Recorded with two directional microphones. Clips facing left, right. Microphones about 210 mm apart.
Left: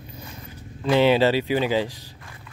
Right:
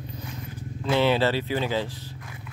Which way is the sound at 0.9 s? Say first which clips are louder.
Left 4 dB; 15° left (ahead or behind).